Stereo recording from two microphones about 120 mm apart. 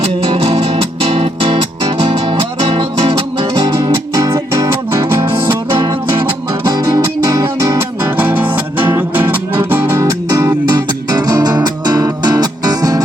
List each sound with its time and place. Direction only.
0.0 s music: 50° right (ahead or behind)
4.1 s music: 25° right (ahead or behind)
6.7 s music: 35° right (ahead or behind)
8.0 s music: 15° right (ahead or behind); by 13.0 s 30° right (ahead or behind)